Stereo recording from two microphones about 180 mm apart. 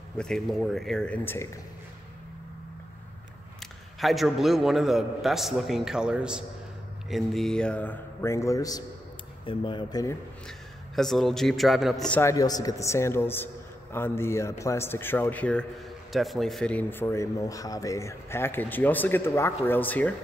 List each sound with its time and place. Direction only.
0.2 s a man's voice: centre (ahead or behind)
4.0 s a man's voice: centre (ahead or behind); by 10.1 s 20° left (ahead or behind)
11.0 s a man's voice: centre (ahead or behind)
12.2 s speech: 20° left (ahead or behind)